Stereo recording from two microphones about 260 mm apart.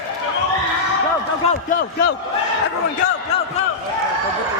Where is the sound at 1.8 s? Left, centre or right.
Left.